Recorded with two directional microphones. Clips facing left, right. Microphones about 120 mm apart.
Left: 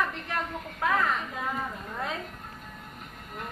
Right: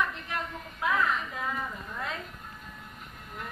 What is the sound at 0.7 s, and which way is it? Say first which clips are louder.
Speech: left 2 dB; 45° left (ahead or behind).